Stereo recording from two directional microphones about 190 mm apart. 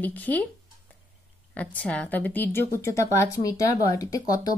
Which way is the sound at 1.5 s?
10° left (ahead or behind).